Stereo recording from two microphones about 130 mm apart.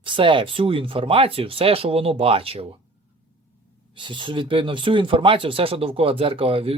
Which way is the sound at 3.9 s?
40° right (ahead or behind).